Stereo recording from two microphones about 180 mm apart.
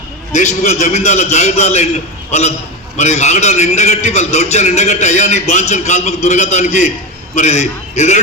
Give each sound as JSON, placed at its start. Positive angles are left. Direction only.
{"t": 0.3, "sound": "a man's voice", "side_deg": 40}
{"t": 3.0, "sound": "a man's voice", "side_deg": 40}